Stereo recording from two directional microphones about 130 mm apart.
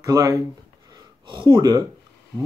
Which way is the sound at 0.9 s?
40° right (ahead or behind).